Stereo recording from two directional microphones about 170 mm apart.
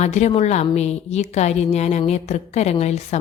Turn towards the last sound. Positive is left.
turn(degrees=40)  # may be behind; listen again after turning